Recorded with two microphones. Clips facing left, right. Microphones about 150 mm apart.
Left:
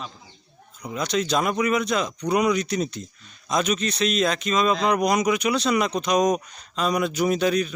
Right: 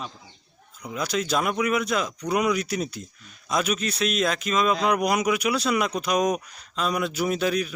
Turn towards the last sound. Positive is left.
turn(degrees=-5)  # may be behind; listen again after turning